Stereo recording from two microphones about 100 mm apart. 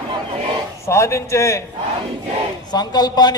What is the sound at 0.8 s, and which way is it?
Speech, 30° left (ahead or behind).